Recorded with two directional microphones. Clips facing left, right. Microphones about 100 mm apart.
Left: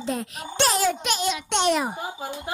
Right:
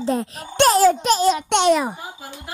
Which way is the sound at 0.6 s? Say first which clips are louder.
Right 8 dB; 45° right (ahead or behind).